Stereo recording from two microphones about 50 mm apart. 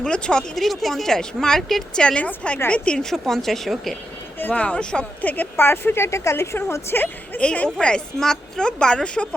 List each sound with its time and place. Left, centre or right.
0.0 s speech: centre
0.5 s speech: centre
2.0 s a woman's voice: left
3.1 s speech: centre
4.5 s a woman's voice: left
5.2 s speech: left
5.5 s speech: left
6.6 s a woman's voice: left
7.3 s a woman's voice: left